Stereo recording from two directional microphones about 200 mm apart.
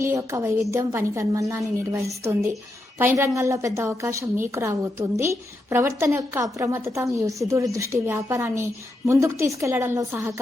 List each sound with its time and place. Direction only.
0.0 s a woman's voice: 15° right (ahead or behind)